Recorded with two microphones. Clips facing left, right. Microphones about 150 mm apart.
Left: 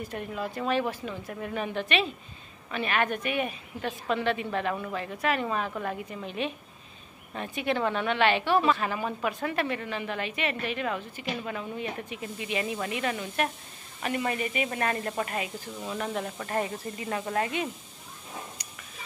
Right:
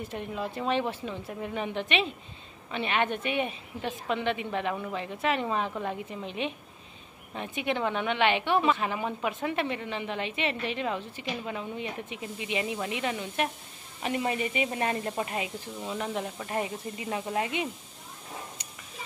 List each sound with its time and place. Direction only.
0.0 s a woman's voice: 25° right (ahead or behind)